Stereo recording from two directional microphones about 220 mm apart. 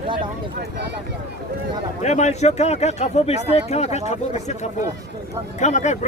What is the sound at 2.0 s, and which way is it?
Speech, 30° left (ahead or behind).